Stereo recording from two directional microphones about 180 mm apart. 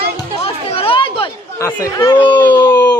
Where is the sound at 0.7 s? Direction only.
30° left (ahead or behind).